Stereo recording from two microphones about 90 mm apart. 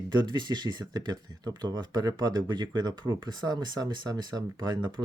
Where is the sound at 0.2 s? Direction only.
55° right (ahead or behind).